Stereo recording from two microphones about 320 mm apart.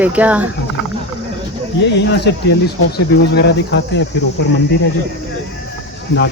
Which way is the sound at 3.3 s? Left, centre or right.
Left.